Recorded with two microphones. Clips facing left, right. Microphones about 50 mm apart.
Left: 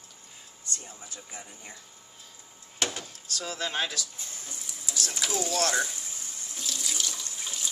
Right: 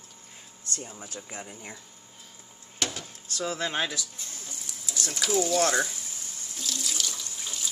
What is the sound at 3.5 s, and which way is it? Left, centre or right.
Speech, centre.